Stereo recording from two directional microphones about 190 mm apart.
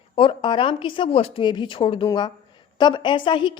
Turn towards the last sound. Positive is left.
turn(degrees=25)  # may be behind; listen again after turning